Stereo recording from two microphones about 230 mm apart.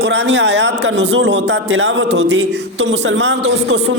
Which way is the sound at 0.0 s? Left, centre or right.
Right.